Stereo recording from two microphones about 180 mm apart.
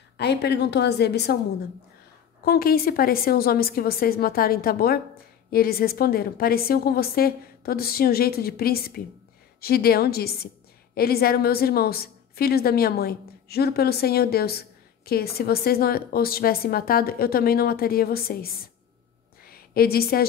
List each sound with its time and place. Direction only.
0.2 s a woman's voice: 65° left (ahead or behind)
2.4 s a woman's voice: 55° left (ahead or behind)
19.4 s a sound: 55° left (ahead or behind)